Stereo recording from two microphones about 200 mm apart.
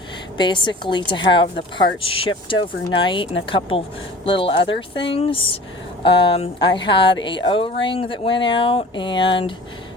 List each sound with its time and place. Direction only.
0.3 s a woman's voice: 25° left (ahead or behind)